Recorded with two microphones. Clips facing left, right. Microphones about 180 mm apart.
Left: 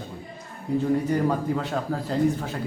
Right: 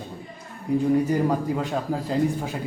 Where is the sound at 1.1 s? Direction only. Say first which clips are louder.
Right 1 dB; 10° right (ahead or behind).